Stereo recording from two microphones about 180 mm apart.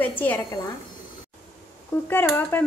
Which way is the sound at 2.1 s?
10° left (ahead or behind).